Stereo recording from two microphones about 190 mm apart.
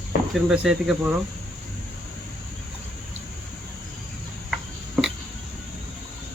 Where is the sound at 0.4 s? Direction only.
5° right (ahead or behind).